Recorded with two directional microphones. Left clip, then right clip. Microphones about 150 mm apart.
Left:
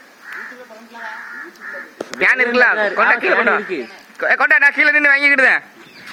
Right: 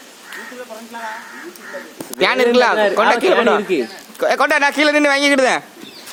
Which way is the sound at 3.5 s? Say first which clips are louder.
Right 2 dB; 15° right (ahead or behind).